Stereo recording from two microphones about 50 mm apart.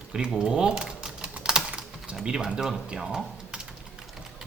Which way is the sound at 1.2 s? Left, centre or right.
Centre.